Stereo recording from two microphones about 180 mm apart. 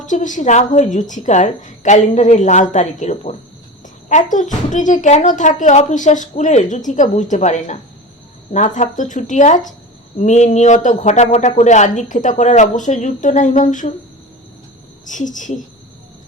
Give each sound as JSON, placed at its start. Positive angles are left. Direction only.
{"t": 0.0, "sound": "speech", "side_deg": 45}
{"t": 15.0, "sound": "speech", "side_deg": 45}